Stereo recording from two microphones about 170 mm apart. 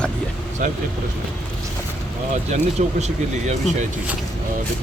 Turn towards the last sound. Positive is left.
turn(degrees=-40)  # may be behind; listen again after turning